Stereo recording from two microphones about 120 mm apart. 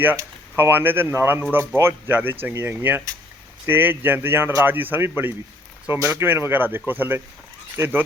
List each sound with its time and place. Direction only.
0.0 s speech: 20° right (ahead or behind)